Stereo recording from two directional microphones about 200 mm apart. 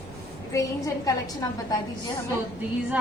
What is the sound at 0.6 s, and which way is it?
Speech, 15° left (ahead or behind).